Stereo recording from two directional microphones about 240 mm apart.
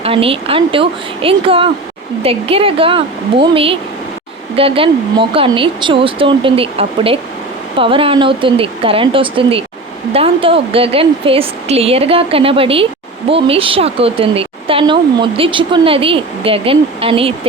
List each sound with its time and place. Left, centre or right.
0.0 s speech: right